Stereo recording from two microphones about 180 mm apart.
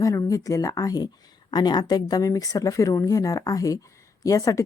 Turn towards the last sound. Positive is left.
turn(degrees=20)  # may be behind; listen again after turning